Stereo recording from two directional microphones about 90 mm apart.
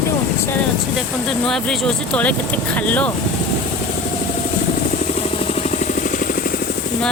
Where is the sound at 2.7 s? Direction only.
15° left (ahead or behind).